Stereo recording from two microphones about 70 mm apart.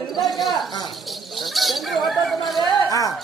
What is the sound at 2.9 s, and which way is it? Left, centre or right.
Speech, left.